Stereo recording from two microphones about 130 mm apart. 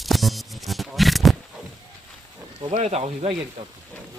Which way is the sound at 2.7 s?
60° right (ahead or behind).